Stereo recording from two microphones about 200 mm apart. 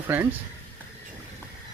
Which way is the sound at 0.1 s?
10° right (ahead or behind).